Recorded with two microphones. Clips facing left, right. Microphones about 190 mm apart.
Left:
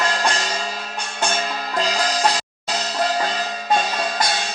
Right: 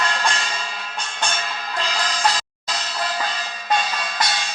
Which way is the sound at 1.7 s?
40° left (ahead or behind).